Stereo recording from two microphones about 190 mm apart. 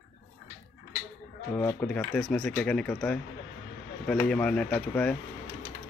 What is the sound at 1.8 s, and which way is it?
Speech, 5° left (ahead or behind).